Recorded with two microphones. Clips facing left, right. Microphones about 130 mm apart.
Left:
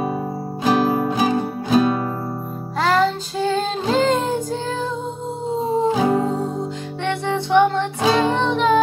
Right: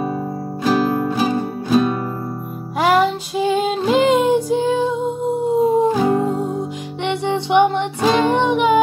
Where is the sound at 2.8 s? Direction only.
10° right (ahead or behind).